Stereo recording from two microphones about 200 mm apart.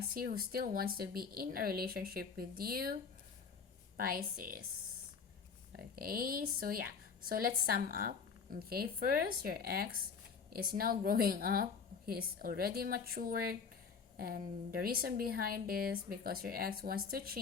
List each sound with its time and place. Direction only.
0.1 s a woman's voice: 45° right (ahead or behind)
3.9 s a woman's voice: 45° right (ahead or behind)
5.7 s a woman's voice: 45° right (ahead or behind)